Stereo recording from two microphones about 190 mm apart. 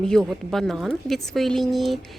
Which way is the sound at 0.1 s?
Centre (ahead or behind).